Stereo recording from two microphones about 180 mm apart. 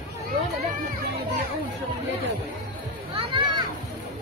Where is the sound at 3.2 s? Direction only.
25° right (ahead or behind).